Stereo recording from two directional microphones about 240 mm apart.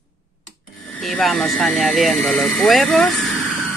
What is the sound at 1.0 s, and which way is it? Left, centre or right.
Speech, centre.